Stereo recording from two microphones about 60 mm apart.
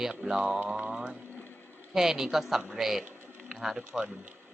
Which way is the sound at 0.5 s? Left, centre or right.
Right.